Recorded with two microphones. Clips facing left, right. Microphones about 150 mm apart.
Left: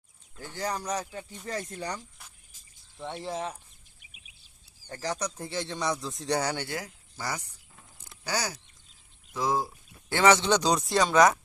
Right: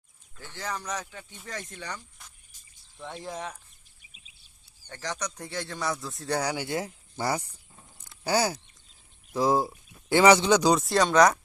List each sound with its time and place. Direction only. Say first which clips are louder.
0.5 s speech: left 3 dB; 35° left (ahead or behind)
3.2 s speech: left 3 dB; 25° left (ahead or behind)
5.0 s speech: left 2 dB; 30° left (ahead or behind)
6.3 s speech: even; 5° right (ahead or behind)
6.7 s speech: right 5 dB; 25° right (ahead or behind)
10.1 s speech: right 3 dB; 15° right (ahead or behind); by 11.3 s 5° left (ahead or behind)